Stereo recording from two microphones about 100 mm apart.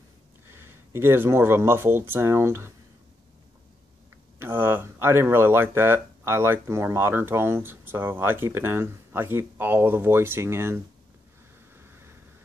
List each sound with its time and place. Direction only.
0.5 s speech: 25° right (ahead or behind)
4.4 s speech: 20° right (ahead or behind)